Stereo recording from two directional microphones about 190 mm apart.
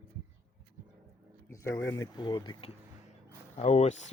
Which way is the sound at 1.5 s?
15° left (ahead or behind).